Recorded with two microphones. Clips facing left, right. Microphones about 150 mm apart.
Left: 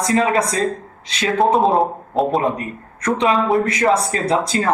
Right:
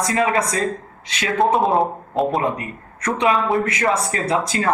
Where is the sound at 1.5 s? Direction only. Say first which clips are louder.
Left 2 dB; centre (ahead or behind).